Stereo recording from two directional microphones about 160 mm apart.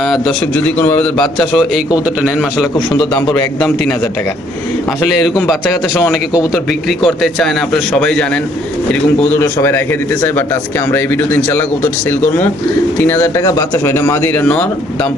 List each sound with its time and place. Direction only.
0.0 s a man's voice: centre (ahead or behind)
5.3 s a man's voice: centre (ahead or behind)
6.0 s speech: 20° left (ahead or behind)
6.5 s a man's voice: centre (ahead or behind)
9.3 s a man's voice: 15° left (ahead or behind)